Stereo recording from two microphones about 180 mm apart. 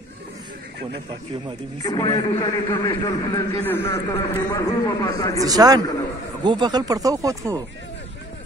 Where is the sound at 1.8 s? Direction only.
20° left (ahead or behind).